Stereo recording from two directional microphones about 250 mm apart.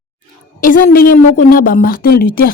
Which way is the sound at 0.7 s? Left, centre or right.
Left.